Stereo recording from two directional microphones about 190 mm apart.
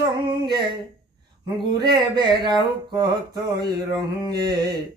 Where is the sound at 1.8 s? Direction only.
25° right (ahead or behind).